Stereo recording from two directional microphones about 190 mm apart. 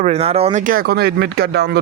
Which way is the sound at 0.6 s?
50° right (ahead or behind).